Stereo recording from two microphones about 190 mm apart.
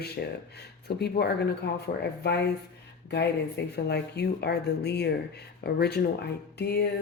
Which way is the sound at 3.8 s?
60° left (ahead or behind).